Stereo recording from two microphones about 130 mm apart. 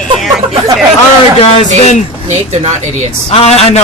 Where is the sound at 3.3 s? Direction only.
55° left (ahead or behind).